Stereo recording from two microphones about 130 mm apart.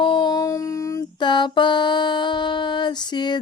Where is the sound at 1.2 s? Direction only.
35° left (ahead or behind).